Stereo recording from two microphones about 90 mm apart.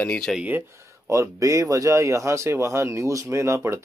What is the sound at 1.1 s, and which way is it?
Speech, 35° right (ahead or behind).